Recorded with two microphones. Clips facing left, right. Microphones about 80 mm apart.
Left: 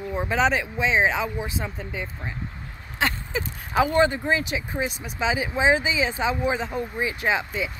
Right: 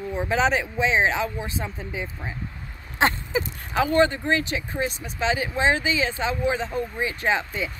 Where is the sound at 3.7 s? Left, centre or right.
Centre.